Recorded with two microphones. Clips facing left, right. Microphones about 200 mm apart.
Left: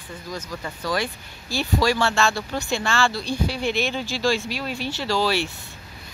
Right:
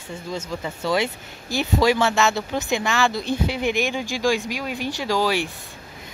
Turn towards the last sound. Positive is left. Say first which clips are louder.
# right 1 dB
turn(degrees=-15)  # may be behind; listen again after turning